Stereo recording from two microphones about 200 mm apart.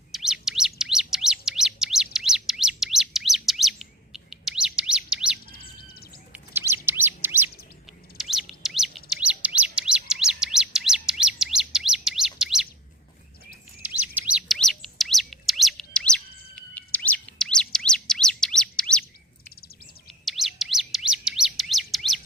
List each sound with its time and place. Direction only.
0.1 s bird: centre (ahead or behind)
5.5 s bird: 50° left (ahead or behind)
6.3 s chirp: 10° right (ahead or behind)
13.8 s chirp: 10° right (ahead or behind)
19.5 s bird: 50° left (ahead or behind)
20.1 s chirp: centre (ahead or behind)